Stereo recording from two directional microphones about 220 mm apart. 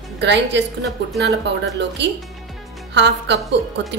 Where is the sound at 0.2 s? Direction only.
50° right (ahead or behind).